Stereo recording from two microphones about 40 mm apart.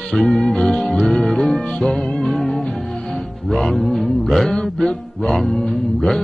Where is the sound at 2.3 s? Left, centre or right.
Centre.